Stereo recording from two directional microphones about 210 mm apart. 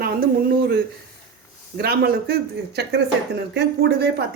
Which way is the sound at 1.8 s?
50° right (ahead or behind).